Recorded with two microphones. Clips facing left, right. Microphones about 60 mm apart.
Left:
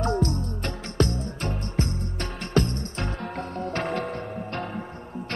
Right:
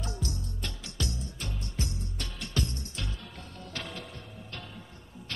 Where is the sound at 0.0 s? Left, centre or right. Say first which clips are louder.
Left 13 dB; left.